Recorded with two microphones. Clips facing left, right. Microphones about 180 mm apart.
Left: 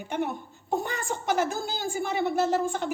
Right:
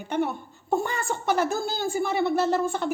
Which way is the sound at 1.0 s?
15° left (ahead or behind).